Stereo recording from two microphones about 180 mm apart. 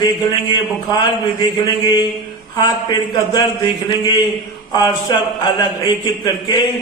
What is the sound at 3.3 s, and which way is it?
A man's voice, 25° left (ahead or behind).